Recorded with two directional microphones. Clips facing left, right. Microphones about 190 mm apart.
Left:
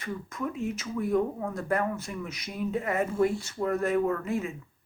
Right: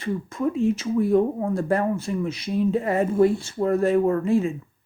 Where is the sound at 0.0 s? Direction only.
30° right (ahead or behind).